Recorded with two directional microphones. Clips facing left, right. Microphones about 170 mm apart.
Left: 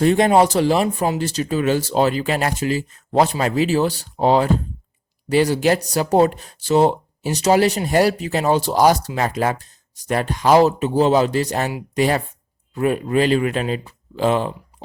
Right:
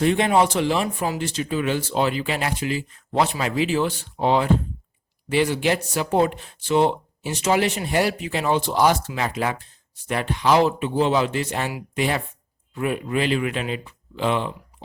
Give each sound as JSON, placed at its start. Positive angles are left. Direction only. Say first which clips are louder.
{"t": 0.0, "sound": "speech", "louder": "left 4 dB", "side_deg": 40}